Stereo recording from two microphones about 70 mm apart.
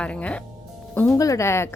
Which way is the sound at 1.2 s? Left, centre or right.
Left.